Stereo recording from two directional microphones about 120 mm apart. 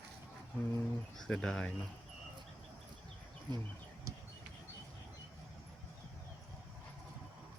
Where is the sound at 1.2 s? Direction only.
5° left (ahead or behind).